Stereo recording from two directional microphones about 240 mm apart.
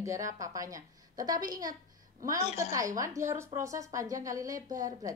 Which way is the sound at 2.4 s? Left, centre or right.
Left.